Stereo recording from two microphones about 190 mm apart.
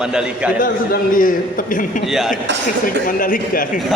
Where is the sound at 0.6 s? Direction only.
50° left (ahead or behind).